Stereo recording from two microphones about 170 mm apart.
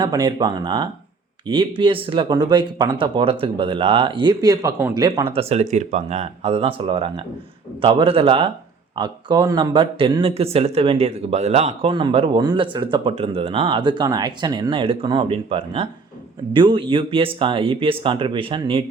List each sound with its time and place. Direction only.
0.0 s speech: 25° right (ahead or behind)
5.0 s speech: 25° right (ahead or behind)